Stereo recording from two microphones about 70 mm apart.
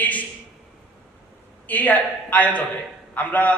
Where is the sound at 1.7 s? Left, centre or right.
Left.